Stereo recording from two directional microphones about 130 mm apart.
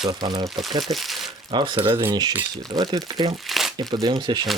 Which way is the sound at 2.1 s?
35° right (ahead or behind).